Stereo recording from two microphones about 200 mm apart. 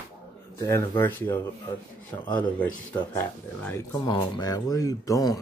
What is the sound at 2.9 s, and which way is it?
Speech, 10° left (ahead or behind).